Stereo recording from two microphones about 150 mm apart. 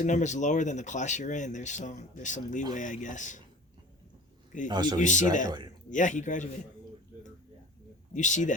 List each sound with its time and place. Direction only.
0.0 s speech: 55° left (ahead or behind)
4.7 s speech: 30° right (ahead or behind)
4.9 s speech: 55° left (ahead or behind)
8.1 s speech: 55° left (ahead or behind)